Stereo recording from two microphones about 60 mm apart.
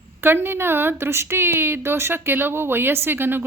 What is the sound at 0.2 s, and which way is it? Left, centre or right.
A woman's voice, right.